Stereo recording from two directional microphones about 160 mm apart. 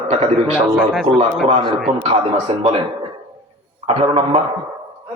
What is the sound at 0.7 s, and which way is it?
Speech, centre (ahead or behind).